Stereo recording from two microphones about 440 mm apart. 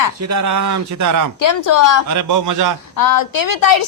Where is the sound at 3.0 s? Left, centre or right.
Left.